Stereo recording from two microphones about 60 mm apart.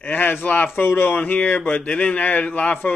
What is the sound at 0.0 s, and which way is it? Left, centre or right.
Speech, left.